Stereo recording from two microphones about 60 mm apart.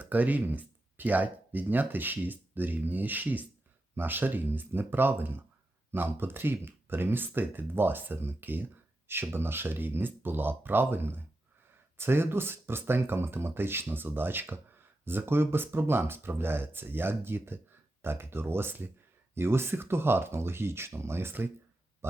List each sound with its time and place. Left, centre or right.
0.0 s speech: right